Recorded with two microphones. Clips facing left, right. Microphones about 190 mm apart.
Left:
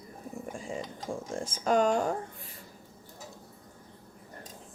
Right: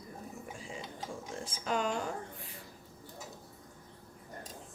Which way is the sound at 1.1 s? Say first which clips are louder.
Left 10 dB; 50° left (ahead or behind).